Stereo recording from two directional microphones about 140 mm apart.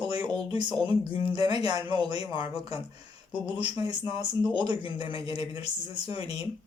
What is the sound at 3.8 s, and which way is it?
Speech, 30° right (ahead or behind).